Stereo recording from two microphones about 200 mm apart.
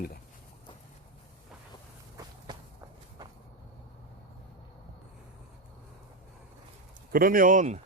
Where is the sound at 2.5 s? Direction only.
20° right (ahead or behind).